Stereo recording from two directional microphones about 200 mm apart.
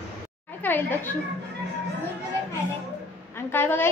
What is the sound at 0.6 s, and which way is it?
Speech, 10° left (ahead or behind).